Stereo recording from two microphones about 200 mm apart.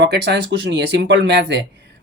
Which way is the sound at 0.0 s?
55° right (ahead or behind).